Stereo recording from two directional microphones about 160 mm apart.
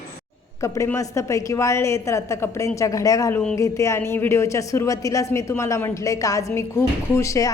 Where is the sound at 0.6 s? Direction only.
15° left (ahead or behind).